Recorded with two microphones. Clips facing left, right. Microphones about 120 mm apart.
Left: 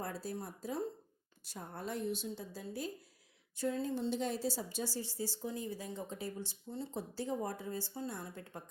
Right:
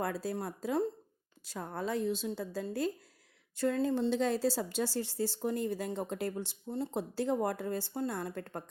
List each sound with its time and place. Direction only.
0.0 s a woman's voice: 90° right
3.5 s a woman's voice: 80° right; by 8.6 s 60° right (ahead or behind)